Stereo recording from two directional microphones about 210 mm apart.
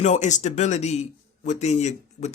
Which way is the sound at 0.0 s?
35° left (ahead or behind).